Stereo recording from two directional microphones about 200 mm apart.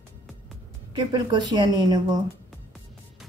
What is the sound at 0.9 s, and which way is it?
A woman's voice, 20° right (ahead or behind).